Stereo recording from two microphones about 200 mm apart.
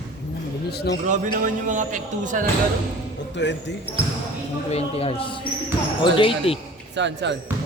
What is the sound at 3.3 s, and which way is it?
Speech, 60° left (ahead or behind).